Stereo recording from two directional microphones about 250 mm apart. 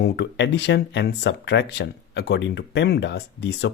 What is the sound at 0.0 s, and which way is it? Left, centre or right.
Speech, left.